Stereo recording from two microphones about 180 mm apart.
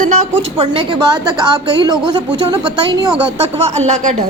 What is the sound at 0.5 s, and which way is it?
A woman's voice, 30° right (ahead or behind).